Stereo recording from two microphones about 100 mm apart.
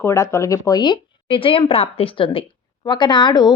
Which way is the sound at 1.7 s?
75° left (ahead or behind).